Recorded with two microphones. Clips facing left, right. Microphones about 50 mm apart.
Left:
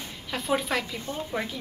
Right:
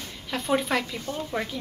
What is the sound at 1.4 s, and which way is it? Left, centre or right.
Speech, centre.